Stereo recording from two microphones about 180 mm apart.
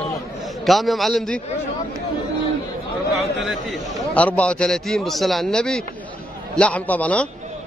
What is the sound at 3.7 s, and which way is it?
A man's voice, 5° left (ahead or behind).